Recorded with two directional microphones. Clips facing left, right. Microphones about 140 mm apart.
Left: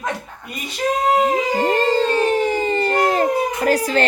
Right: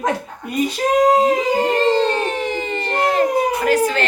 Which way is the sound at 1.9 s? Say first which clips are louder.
Left 1 dB; 40° left (ahead or behind).